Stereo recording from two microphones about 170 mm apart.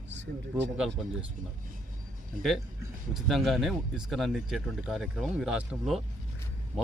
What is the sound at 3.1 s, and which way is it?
Speech, centre (ahead or behind).